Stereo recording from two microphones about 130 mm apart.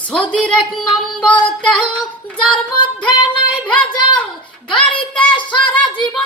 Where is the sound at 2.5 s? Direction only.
40° left (ahead or behind).